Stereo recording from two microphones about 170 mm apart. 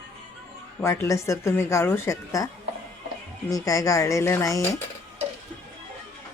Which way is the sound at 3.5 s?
20° left (ahead or behind).